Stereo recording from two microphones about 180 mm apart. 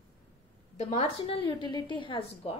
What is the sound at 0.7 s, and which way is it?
A woman's voice, 40° left (ahead or behind).